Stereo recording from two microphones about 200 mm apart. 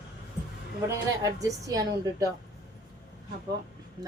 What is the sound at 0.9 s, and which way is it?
Speech, 15° right (ahead or behind).